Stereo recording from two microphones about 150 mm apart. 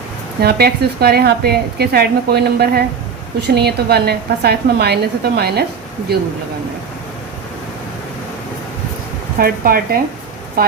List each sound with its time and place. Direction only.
0.4 s a woman's voice: 90° right
9.4 s speech: 80° right